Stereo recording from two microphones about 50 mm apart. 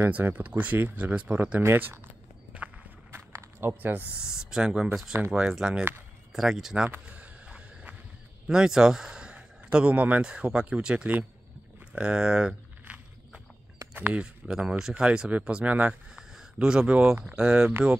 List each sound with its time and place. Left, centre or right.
0.2 s speech: right
1.6 s speech: right
3.1 s a sound: right
4.1 s speech: centre
6.3 s speech: centre
7.1 s a sound: right
8.5 s speech: centre; by 10.2 s right
10.2 s speech: centre
12.8 s walk: right
13.9 s speech: right
14.2 s speech: centre
15.6 s speech: right
15.9 s a sound: centre
16.5 s speech: right